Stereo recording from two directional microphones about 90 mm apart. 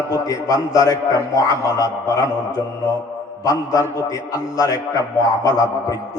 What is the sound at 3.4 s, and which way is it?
A man's voice, 40° left (ahead or behind).